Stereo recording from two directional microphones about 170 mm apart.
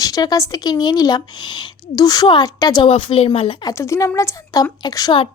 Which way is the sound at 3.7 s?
15° left (ahead or behind).